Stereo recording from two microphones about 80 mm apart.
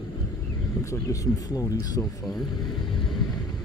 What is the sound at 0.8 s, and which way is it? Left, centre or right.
Speech, left.